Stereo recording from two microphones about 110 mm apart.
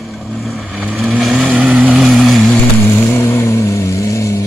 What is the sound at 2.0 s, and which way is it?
Vehicle, centre (ahead or behind).